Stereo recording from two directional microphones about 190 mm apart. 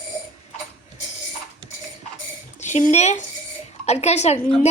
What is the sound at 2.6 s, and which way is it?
A woman's voice, 40° left (ahead or behind).